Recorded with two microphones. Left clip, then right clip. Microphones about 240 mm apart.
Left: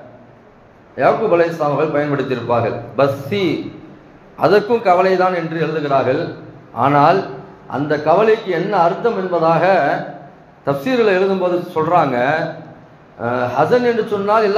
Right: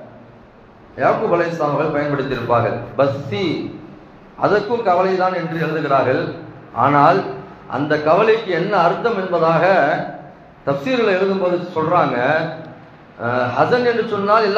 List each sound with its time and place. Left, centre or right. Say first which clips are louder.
0.9 s a man's voice: left 3 dB; left
4.4 s a man's voice: left 3 dB; left